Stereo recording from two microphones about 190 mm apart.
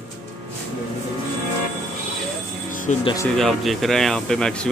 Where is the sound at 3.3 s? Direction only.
Centre (ahead or behind).